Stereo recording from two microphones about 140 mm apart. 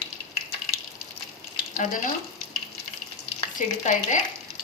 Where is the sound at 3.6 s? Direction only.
65° left (ahead or behind).